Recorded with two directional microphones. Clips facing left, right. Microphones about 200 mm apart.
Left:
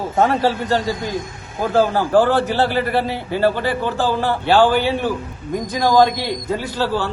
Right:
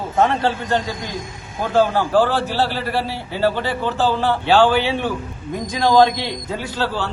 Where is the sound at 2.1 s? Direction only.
15° left (ahead or behind).